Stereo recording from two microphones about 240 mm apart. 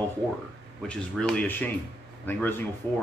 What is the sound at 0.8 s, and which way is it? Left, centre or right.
Speech, centre.